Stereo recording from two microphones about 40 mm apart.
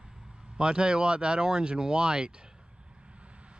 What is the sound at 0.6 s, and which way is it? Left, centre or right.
Speech, right.